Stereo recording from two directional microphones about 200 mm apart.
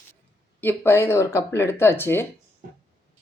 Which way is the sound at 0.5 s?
10° left (ahead or behind).